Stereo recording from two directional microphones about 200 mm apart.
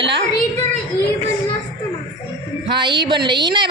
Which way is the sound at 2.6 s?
25° right (ahead or behind).